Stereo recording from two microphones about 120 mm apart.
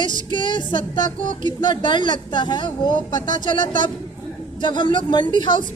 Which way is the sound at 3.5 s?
90° right.